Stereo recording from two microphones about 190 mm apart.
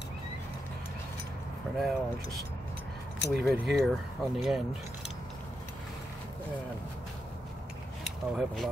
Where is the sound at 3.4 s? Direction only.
Centre (ahead or behind).